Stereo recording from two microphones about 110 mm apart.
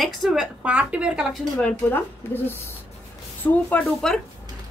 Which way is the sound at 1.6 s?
15° left (ahead or behind).